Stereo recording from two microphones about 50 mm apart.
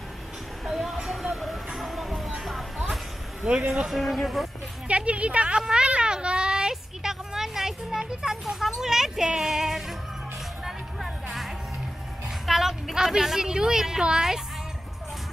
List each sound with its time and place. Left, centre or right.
1.3 s music: centre
3.4 s speech: centre
4.8 s a woman's voice: right
6.7 s a sound: centre
9.4 s music: centre
12.4 s a woman's voice: centre